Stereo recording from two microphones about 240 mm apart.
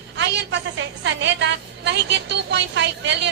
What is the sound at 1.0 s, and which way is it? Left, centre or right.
A woman's voice, right.